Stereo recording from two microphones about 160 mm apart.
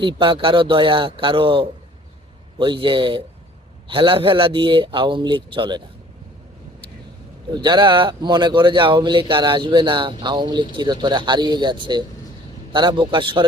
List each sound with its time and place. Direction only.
0.0 s a man's voice: 30° right (ahead or behind)
2.8 s a man's voice: 30° right (ahead or behind)
7.5 s speech: 30° right (ahead or behind)